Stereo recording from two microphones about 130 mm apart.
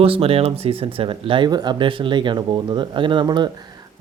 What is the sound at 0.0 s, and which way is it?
Speech, 45° right (ahead or behind).